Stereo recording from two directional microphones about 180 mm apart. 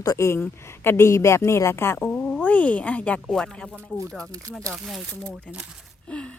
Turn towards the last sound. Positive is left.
turn(degrees=5)  # may be behind; listen again after turning